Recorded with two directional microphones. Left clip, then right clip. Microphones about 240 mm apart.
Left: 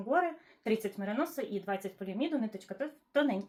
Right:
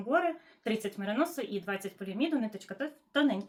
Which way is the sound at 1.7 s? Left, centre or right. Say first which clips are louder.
Even; centre.